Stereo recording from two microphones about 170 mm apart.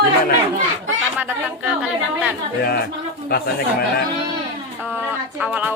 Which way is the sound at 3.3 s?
65° left (ahead or behind).